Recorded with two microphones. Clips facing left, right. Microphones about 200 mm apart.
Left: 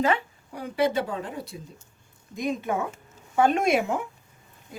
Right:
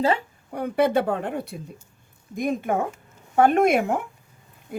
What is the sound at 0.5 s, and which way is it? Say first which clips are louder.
A woman's voice: right 4 dB; 60° right (ahead or behind).